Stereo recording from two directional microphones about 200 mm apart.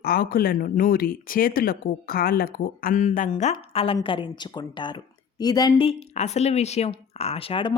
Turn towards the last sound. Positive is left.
turn(degrees=25)  # may be behind; listen again after turning